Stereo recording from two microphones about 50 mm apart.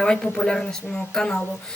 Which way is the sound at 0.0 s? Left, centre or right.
Centre.